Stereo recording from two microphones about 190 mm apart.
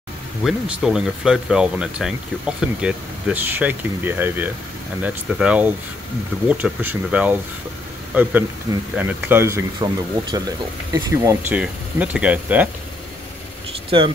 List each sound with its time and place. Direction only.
0.4 s speech: centre (ahead or behind)
13.8 s speech: 25° right (ahead or behind)